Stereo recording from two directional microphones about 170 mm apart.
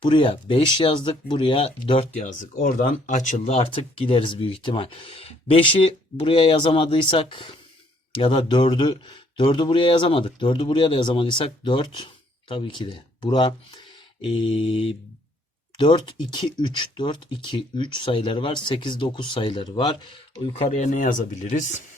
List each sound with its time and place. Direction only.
0.0 s speech: 25° left (ahead or behind); by 21.8 s 45° left (ahead or behind)